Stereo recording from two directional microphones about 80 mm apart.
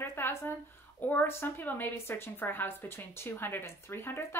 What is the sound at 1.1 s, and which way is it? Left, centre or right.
A woman's voice, left.